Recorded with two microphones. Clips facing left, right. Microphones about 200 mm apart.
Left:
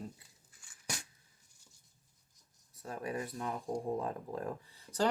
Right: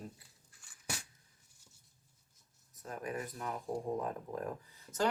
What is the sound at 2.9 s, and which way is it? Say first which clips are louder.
Speech: left 2 dB; 25° left (ahead or behind).